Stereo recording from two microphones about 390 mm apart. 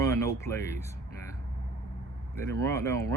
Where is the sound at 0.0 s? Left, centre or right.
Centre.